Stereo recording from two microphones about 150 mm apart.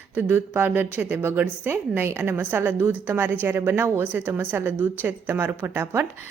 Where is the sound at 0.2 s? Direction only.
15° right (ahead or behind).